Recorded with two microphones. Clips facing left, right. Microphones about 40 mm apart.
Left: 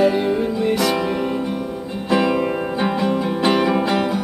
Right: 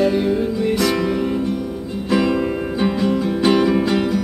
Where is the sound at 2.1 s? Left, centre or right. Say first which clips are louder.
Even; centre.